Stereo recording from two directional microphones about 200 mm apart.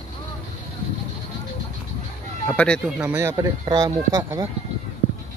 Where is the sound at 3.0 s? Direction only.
10° right (ahead or behind).